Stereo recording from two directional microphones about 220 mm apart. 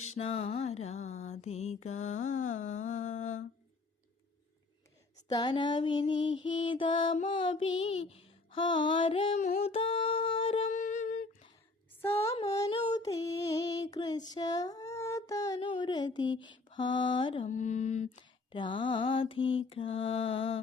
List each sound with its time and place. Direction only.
0.2 s mantra: 25° left (ahead or behind)
5.3 s mantra: 20° left (ahead or behind)
9.6 s a sound: 25° left (ahead or behind)
12.5 s female singing: 15° left (ahead or behind)
16.4 s mantra: 20° left (ahead or behind)
17.5 s mantra: 35° left (ahead or behind)